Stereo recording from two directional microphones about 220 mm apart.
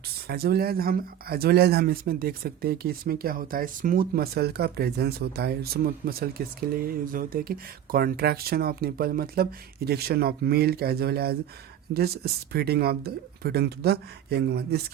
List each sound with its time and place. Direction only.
0.3 s speech: 45° right (ahead or behind)